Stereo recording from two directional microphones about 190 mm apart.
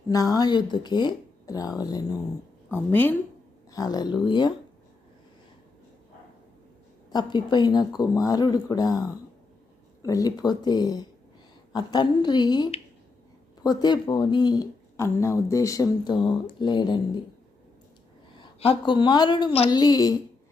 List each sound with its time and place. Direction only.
0.1 s a woman's voice: 20° left (ahead or behind)
7.1 s speech: 20° left (ahead or behind)
18.3 s a woman's voice: 25° left (ahead or behind)